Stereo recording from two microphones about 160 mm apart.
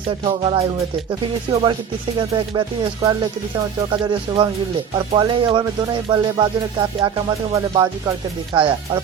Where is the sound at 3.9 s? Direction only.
30° right (ahead or behind).